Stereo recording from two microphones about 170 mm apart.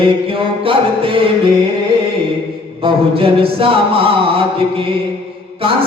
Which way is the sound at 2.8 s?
35° right (ahead or behind).